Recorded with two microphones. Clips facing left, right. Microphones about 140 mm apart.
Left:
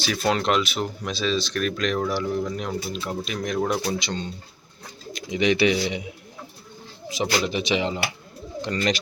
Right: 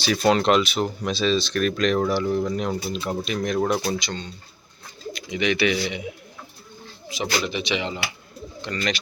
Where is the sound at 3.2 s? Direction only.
10° left (ahead or behind).